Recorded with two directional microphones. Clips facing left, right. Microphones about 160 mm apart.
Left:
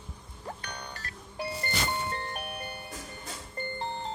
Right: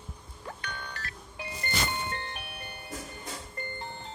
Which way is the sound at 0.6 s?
40° left (ahead or behind).